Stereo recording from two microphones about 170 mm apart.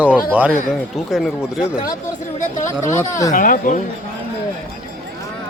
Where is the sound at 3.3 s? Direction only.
50° left (ahead or behind).